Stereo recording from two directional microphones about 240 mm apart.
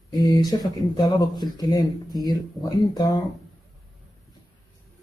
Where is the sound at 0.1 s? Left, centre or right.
Centre.